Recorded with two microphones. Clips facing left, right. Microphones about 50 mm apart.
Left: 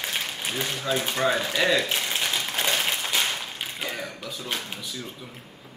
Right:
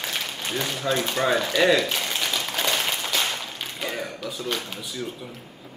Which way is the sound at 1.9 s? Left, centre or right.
Centre.